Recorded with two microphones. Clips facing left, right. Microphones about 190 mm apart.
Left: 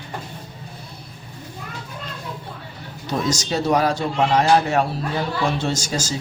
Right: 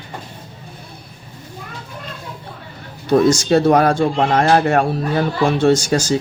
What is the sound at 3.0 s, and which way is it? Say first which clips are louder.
Speech: right 10 dB; 55° right (ahead or behind).